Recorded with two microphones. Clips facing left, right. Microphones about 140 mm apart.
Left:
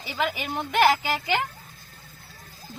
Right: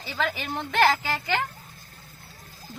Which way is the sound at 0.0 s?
15° left (ahead or behind).